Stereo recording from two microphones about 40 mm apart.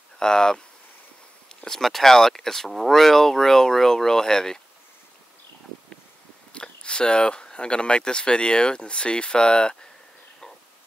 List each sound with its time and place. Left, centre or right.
0.2 s speech: centre
1.7 s speech: centre
6.5 s speech: left